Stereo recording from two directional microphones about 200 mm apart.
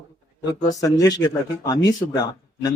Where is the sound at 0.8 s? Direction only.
20° left (ahead or behind).